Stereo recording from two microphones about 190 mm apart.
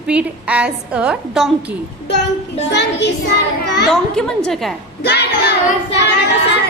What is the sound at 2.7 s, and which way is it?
Speech, 65° left (ahead or behind).